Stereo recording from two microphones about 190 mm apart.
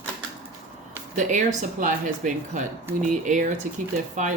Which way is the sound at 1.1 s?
40° right (ahead or behind).